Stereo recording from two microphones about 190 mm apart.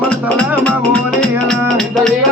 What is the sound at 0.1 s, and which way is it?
Music, 5° left (ahead or behind).